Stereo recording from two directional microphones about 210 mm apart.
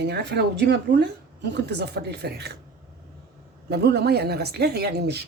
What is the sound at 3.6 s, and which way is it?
Speech, 50° right (ahead or behind).